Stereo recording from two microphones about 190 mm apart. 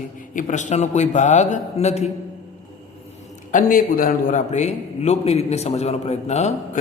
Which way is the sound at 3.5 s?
45° left (ahead or behind).